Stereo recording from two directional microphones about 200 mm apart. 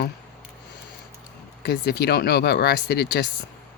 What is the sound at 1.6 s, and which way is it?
Speech, 55° left (ahead or behind).